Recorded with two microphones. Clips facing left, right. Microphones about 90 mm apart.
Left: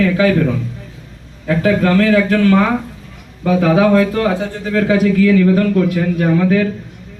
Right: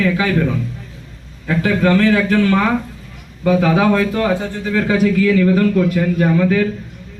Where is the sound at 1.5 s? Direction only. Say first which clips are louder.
Left 1 dB; centre (ahead or behind).